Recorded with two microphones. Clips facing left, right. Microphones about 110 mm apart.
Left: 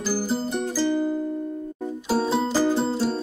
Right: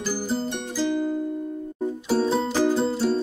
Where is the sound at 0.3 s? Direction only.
Centre (ahead or behind).